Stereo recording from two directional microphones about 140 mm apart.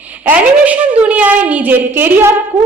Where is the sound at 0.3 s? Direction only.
10° right (ahead or behind).